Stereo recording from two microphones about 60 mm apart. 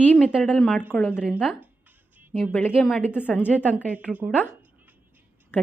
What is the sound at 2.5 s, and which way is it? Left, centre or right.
Speech, left.